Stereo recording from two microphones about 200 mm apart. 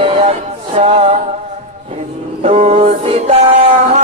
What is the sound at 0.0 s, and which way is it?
Music, 30° right (ahead or behind).